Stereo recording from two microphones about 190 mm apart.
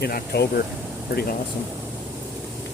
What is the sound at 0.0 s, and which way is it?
Speech, 55° left (ahead or behind).